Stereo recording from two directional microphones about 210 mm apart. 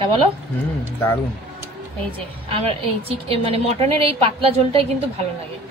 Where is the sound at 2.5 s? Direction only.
25° right (ahead or behind).